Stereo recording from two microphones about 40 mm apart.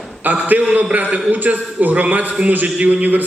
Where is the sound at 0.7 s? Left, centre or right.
Right.